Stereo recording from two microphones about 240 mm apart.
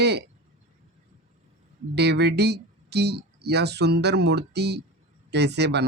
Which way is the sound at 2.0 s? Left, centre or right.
Right.